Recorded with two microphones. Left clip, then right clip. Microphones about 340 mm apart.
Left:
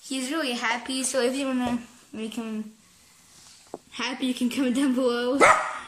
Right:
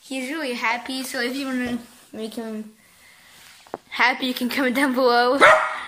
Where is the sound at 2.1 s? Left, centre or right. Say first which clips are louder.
Right 3 dB; right.